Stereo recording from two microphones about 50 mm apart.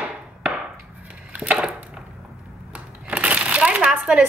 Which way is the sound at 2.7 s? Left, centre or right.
Right.